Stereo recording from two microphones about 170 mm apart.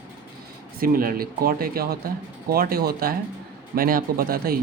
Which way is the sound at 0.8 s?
60° right (ahead or behind).